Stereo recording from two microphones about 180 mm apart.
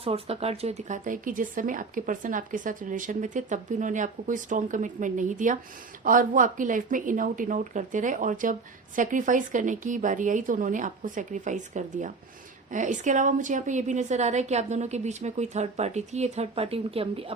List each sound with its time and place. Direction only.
0.0 s a woman's voice: 35° right (ahead or behind)